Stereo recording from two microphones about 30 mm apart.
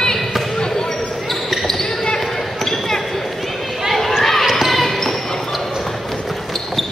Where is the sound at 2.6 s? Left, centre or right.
Centre.